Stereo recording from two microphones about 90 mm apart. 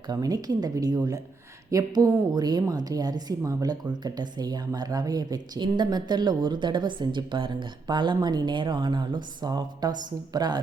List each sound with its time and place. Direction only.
0.1 s a woman's voice: 45° right (ahead or behind)